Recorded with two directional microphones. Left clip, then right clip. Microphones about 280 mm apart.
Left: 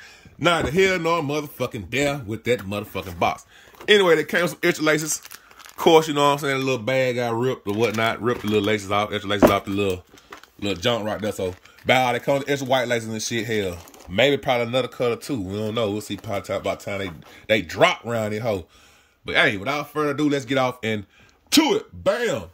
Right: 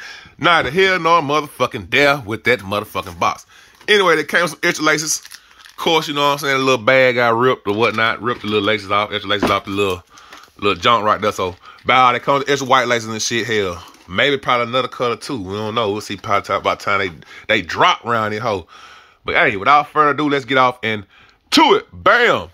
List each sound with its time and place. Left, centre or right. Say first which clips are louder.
0.4 s speech: right 6 dB; centre
12.8 s speech: right 6 dB; right
13.1 s speech: right 7 dB; centre